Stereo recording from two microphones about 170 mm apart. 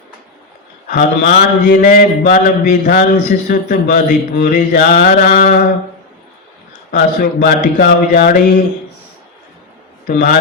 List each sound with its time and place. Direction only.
0.9 s mantra: 55° left (ahead or behind)
6.9 s speech: 60° left (ahead or behind)
10.1 s mantra: 55° left (ahead or behind)